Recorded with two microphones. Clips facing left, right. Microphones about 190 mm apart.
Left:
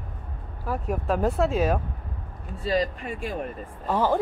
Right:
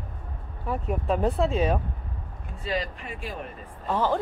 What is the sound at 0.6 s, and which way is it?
Speech, centre (ahead or behind).